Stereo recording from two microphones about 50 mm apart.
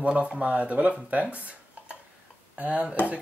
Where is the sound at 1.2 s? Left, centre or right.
Right.